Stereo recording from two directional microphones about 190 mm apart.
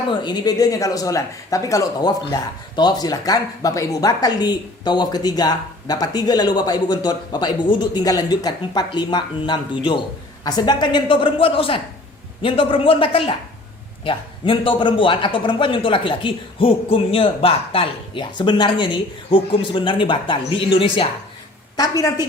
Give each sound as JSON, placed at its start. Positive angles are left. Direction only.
{"t": 0.1, "sound": "speech", "side_deg": 20}